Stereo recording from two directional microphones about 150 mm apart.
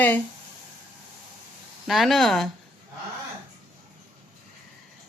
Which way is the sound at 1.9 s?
Centre (ahead or behind).